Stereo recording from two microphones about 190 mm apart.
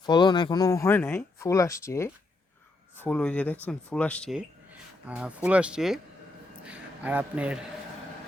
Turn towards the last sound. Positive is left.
turn(degrees=-5)  # may be behind; listen again after turning